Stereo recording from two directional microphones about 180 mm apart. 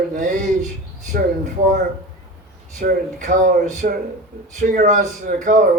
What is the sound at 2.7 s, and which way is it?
A man's voice, 45° right (ahead or behind).